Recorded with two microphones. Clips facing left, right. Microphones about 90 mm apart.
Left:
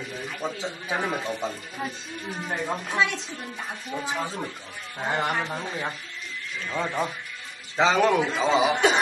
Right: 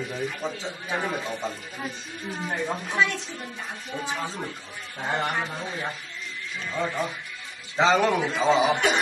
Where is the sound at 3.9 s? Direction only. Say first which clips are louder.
Left 1 dB; 30° left (ahead or behind).